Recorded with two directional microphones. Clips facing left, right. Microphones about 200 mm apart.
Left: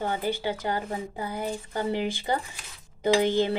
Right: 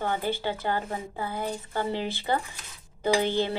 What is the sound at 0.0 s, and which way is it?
Speech, 15° left (ahead or behind).